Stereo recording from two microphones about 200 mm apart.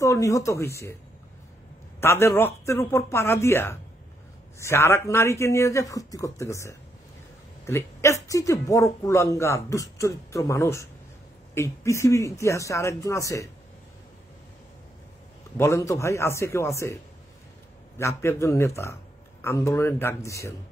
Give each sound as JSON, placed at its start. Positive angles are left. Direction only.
{"t": 0.0, "sound": "speech", "side_deg": 15}
{"t": 2.0, "sound": "speech", "side_deg": 10}
{"t": 15.5, "sound": "speech", "side_deg": 15}